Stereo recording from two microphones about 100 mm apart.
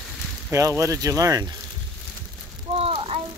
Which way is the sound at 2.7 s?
70° right (ahead or behind).